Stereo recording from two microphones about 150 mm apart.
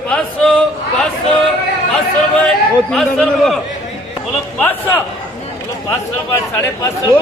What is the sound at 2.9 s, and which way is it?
Speech, 5° left (ahead or behind).